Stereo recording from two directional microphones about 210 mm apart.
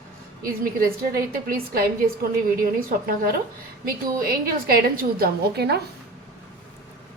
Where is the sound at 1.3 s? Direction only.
45° right (ahead or behind).